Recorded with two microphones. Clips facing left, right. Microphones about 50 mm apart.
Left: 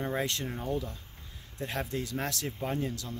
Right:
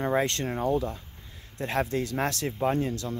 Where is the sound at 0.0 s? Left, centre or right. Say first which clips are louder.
Right 6 dB; right.